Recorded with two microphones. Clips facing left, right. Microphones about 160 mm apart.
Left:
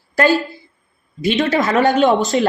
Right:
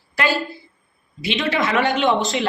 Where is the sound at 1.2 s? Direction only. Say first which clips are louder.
Left 5 dB; 45° left (ahead or behind).